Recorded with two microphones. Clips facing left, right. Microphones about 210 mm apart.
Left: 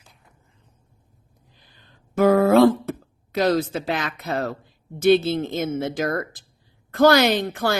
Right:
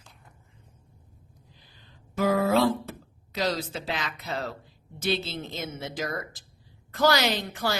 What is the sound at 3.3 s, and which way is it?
A woman's voice, 55° left (ahead or behind).